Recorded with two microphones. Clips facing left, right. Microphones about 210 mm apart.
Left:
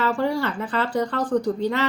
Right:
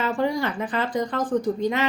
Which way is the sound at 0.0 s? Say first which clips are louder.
Left 1 dB; 15° right (ahead or behind).